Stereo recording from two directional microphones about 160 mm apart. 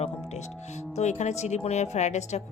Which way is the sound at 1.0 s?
45° left (ahead or behind).